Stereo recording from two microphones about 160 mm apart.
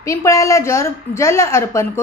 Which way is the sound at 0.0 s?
20° left (ahead or behind).